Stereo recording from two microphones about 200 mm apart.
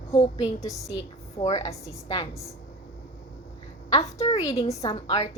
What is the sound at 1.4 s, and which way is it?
Speech, 35° left (ahead or behind).